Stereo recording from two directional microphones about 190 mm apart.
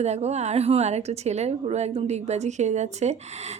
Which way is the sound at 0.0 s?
35° right (ahead or behind).